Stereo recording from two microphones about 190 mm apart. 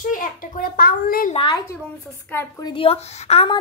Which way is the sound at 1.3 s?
25° left (ahead or behind).